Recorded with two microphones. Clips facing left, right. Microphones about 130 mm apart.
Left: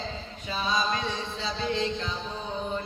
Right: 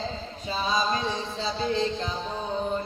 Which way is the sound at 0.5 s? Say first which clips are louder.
Right 2 dB; 30° right (ahead or behind).